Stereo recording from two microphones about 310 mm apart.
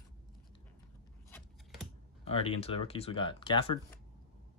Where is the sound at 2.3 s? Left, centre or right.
Centre.